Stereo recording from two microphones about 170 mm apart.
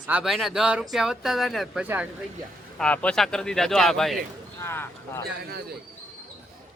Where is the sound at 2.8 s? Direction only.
5° left (ahead or behind).